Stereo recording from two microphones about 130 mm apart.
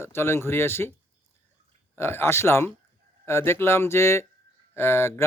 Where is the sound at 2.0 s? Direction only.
20° left (ahead or behind).